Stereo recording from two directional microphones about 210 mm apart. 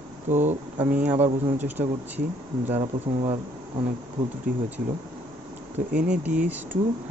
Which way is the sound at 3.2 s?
25° right (ahead or behind).